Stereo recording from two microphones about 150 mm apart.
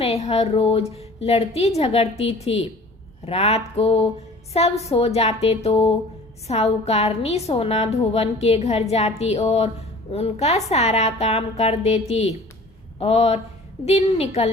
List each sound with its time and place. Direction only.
0.0 s a woman's voice: 45° left (ahead or behind)